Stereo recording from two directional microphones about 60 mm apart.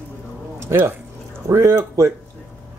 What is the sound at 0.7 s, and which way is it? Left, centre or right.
Speech, right.